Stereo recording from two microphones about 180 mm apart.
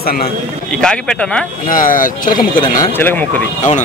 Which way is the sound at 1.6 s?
50° left (ahead or behind).